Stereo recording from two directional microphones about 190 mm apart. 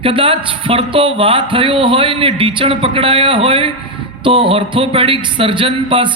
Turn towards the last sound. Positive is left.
turn(degrees=-25)  # may be behind; listen again after turning